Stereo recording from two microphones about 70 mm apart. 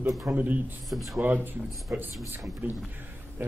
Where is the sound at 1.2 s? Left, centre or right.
Right.